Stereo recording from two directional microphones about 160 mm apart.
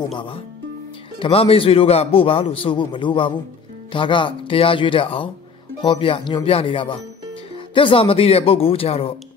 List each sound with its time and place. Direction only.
0.1 s a man's voice: 35° left (ahead or behind)